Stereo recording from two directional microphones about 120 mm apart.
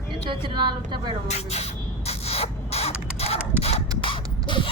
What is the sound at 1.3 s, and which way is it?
Spray, 60° left (ahead or behind).